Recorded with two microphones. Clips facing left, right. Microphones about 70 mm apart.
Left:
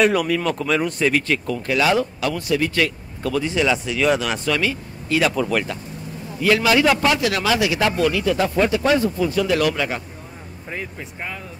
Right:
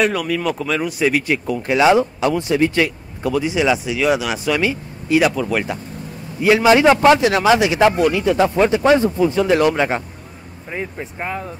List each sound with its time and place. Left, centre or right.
0.0 s speech: centre
5.3 s speech: centre
6.4 s a man's voice: right